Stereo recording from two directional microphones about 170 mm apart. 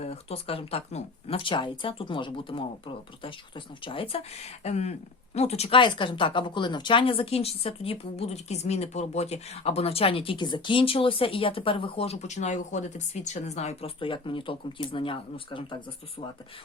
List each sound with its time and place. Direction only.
0.0 s speech: 35° left (ahead or behind)